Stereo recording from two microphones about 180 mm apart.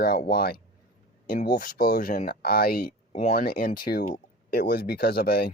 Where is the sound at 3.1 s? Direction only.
45° left (ahead or behind).